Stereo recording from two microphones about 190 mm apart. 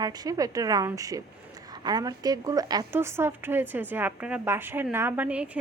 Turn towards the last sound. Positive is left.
turn(degrees=-5)  # may be behind; listen again after turning